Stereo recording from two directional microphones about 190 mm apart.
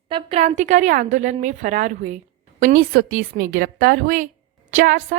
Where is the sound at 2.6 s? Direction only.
50° right (ahead or behind).